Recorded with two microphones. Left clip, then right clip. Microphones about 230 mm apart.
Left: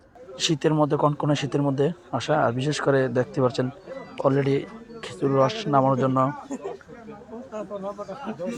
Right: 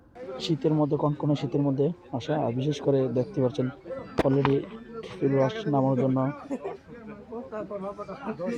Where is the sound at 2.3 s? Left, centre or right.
Left.